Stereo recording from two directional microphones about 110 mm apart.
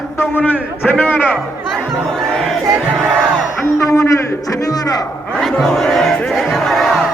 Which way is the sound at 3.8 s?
25° left (ahead or behind).